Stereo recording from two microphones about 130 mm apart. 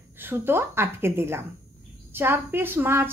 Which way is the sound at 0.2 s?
15° right (ahead or behind).